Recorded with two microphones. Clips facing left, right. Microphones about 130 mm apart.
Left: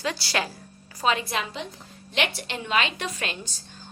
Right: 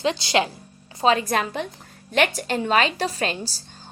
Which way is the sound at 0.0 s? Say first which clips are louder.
Right 6 dB; 20° right (ahead or behind).